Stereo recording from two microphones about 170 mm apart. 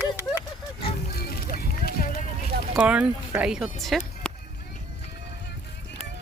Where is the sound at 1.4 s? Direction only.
65° left (ahead or behind).